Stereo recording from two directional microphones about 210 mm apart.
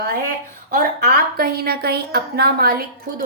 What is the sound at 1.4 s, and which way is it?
A woman's voice, 45° right (ahead or behind).